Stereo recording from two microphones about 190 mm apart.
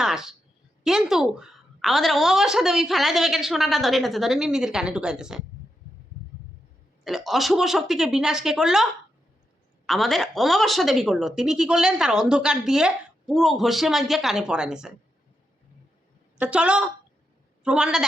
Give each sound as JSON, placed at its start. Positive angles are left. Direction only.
{"t": 0.0, "sound": "a sound", "side_deg": -5}
{"t": 0.9, "sound": "speech", "side_deg": 0}
{"t": 7.0, "sound": "speech", "side_deg": 0}
{"t": 16.4, "sound": "a man's voice", "side_deg": -5}